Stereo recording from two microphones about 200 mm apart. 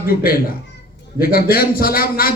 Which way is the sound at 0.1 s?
45° left (ahead or behind).